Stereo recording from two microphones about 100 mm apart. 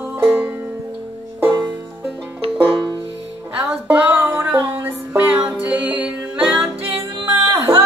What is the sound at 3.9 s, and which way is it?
Music, 15° right (ahead or behind).